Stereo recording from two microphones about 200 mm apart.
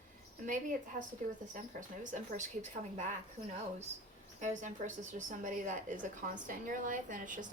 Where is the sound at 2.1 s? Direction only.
40° right (ahead or behind).